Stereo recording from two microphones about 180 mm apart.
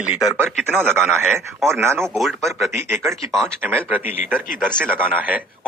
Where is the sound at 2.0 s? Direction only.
Centre (ahead or behind).